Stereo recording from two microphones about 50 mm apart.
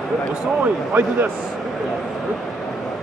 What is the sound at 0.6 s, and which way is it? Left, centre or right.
Speech, right.